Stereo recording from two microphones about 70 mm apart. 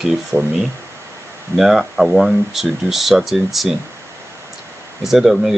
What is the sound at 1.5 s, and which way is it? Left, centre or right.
Speech, centre.